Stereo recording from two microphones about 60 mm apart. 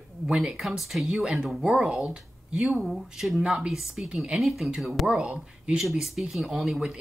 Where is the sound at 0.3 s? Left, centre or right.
Centre.